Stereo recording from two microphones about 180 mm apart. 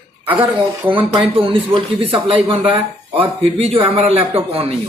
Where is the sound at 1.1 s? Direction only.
30° right (ahead or behind).